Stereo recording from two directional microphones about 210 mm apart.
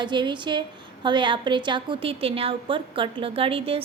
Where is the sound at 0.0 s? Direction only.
20° right (ahead or behind).